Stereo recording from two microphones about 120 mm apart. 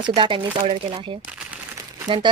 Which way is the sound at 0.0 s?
40° right (ahead or behind).